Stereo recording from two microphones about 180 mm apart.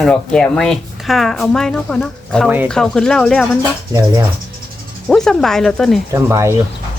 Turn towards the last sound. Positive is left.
turn(degrees=-15)  # may be behind; listen again after turning